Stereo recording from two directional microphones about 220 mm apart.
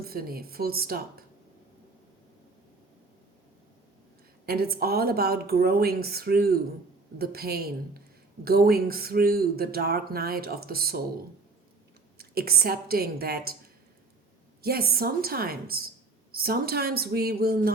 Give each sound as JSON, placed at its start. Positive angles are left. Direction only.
{"t": 0.0, "sound": "speech", "side_deg": -45}
{"t": 4.4, "sound": "speech", "side_deg": -45}
{"t": 12.1, "sound": "speech", "side_deg": -45}
{"t": 14.6, "sound": "speech", "side_deg": -45}